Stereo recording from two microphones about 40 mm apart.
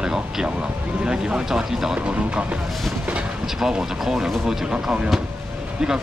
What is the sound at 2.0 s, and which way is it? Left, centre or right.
Speech, right.